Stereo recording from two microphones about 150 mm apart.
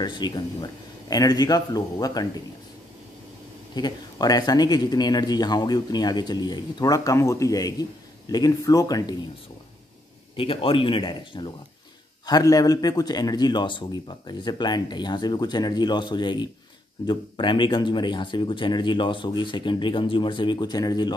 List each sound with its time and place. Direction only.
0.0 s a man's voice: 30° left (ahead or behind)
3.7 s a man's voice: 25° left (ahead or behind)
10.3 s a man's voice: 35° left (ahead or behind)